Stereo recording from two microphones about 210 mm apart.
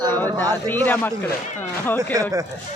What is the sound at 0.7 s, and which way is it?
A man's voice, 10° left (ahead or behind).